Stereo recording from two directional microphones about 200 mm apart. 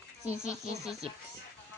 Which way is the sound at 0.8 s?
Centre (ahead or behind).